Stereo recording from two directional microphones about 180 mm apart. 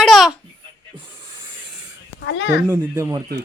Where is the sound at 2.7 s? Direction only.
15° right (ahead or behind).